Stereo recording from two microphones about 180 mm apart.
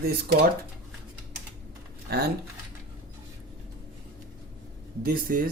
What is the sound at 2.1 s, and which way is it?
Speech, 60° right (ahead or behind).